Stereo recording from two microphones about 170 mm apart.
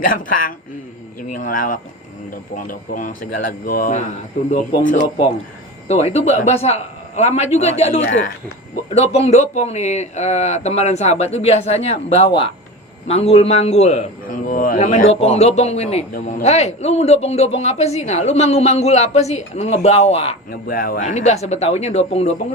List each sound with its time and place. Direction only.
0.0 s speech: 55° left (ahead or behind)
5.9 s a man's voice: 40° left (ahead or behind)
14.4 s a man's voice: 55° left (ahead or behind); by 20.3 s 35° left (ahead or behind)
20.5 s a man's voice: 60° left (ahead or behind); by 22.3 s 40° left (ahead or behind)